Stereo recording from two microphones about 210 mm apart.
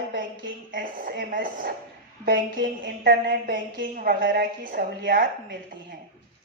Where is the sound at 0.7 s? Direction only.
40° right (ahead or behind).